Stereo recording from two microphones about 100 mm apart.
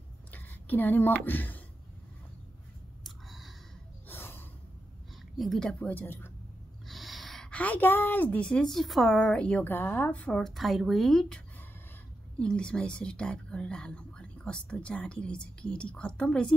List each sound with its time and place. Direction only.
0.3 s speech: 20° left (ahead or behind)
3.0 s clicking: centre (ahead or behind)
4.1 s gasp: 20° left (ahead or behind)
5.4 s speech: 5° left (ahead or behind)
5.9 s a woman's voice: 20° left (ahead or behind)
6.9 s a woman's voice: centre (ahead or behind); by 10.4 s 15° left (ahead or behind)
10.4 s speech: centre (ahead or behind)